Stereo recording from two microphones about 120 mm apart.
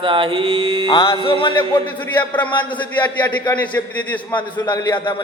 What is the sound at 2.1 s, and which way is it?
A man's voice, 15° left (ahead or behind).